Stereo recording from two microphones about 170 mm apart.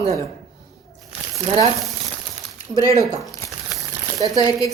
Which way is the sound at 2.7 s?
20° left (ahead or behind).